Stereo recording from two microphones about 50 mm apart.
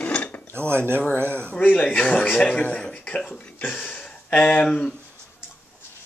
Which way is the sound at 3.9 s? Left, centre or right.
Left.